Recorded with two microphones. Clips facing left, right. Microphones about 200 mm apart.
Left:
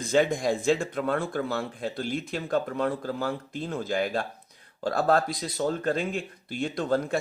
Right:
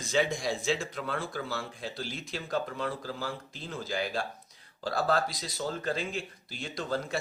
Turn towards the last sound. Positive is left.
turn(degrees=55)  # may be behind; listen again after turning